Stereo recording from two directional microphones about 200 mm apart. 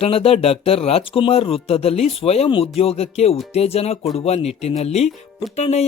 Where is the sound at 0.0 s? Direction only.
30° left (ahead or behind).